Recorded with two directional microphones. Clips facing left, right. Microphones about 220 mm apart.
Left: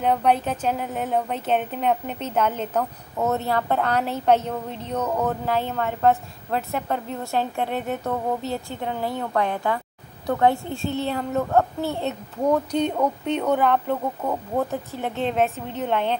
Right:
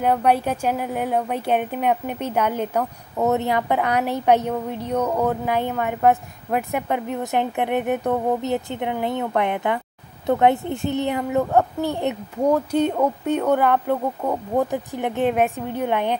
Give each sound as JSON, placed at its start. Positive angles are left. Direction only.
{"t": 0.0, "sound": "a woman's voice", "side_deg": -10}